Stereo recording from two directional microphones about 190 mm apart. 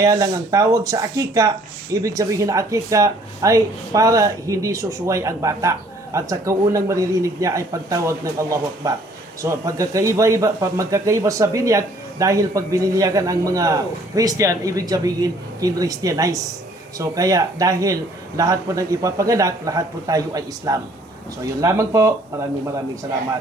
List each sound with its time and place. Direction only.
0.0 s speech: 20° right (ahead or behind)